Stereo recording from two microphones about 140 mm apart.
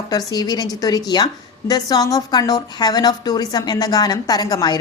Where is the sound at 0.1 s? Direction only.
25° left (ahead or behind).